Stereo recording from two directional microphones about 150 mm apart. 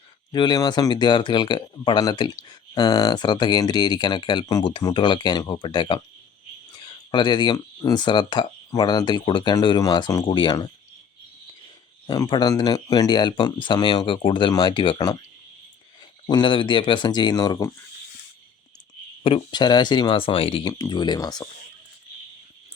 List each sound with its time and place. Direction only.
0.3 s speech: 30° left (ahead or behind)
12.0 s speech: 30° left (ahead or behind)
16.2 s speech: 30° left (ahead or behind)
19.2 s speech: 30° left (ahead or behind)